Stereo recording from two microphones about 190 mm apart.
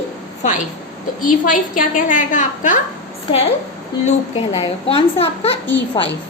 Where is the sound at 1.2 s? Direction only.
45° left (ahead or behind).